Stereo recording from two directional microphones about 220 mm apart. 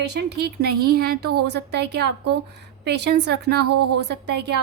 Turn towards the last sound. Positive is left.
turn(degrees=-50)  # may be behind; listen again after turning